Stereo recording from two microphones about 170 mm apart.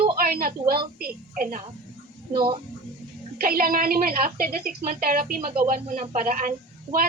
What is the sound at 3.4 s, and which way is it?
A woman's voice, 55° right (ahead or behind).